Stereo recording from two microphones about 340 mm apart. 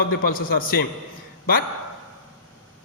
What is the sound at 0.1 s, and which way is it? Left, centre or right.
Speech, left.